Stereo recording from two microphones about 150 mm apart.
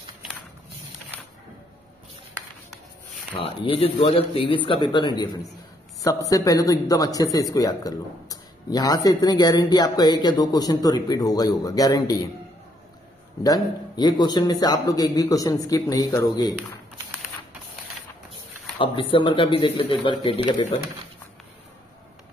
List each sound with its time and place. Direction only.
3.4 s speech: 40° left (ahead or behind); by 12.3 s 25° left (ahead or behind)
13.4 s speech: 25° left (ahead or behind)
18.8 s speech: 35° left (ahead or behind)